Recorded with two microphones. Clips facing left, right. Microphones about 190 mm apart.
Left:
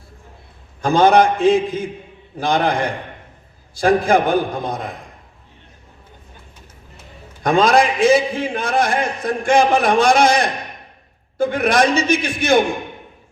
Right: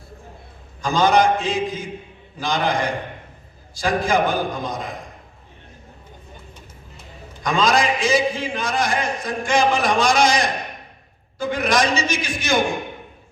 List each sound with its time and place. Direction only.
0.8 s a man's voice: 60° left (ahead or behind)
7.4 s a man's voice: 60° left (ahead or behind)